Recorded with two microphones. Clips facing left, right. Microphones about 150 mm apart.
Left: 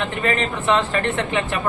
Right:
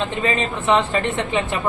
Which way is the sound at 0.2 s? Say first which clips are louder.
Even; 20° right (ahead or behind).